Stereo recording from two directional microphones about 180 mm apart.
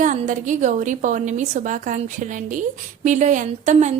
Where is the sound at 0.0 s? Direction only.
45° right (ahead or behind).